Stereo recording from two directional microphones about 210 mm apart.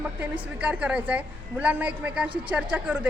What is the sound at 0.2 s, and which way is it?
A woman's voice, 5° right (ahead or behind).